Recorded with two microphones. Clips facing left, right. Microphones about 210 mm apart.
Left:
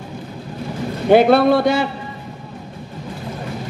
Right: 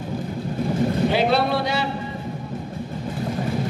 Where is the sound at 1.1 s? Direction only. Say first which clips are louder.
Left 8 dB; 50° left (ahead or behind).